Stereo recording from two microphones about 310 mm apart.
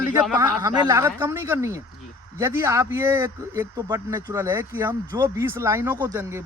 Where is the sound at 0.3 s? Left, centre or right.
Centre.